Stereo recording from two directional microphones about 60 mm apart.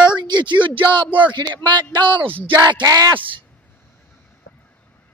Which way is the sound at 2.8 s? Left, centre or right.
Right.